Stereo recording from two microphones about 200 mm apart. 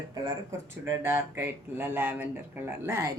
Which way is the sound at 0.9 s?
10° right (ahead or behind).